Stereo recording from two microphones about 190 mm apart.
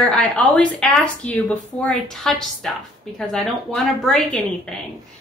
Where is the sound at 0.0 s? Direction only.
Centre (ahead or behind).